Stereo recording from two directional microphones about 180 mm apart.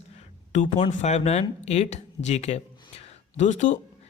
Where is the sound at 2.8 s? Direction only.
35° left (ahead or behind).